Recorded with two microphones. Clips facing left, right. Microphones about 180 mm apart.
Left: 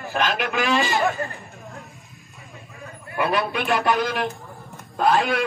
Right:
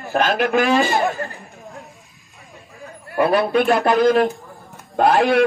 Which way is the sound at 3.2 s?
40° right (ahead or behind).